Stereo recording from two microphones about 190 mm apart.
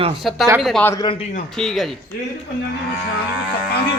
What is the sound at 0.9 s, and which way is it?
Speech, 25° left (ahead or behind).